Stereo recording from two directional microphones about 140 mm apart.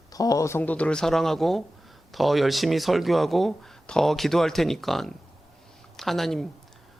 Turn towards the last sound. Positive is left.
turn(degrees=0)  # may be behind; listen again after turning